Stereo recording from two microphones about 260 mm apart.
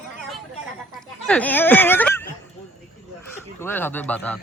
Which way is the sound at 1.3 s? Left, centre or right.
Centre.